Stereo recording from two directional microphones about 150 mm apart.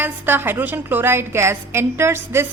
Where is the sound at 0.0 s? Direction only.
15° right (ahead or behind).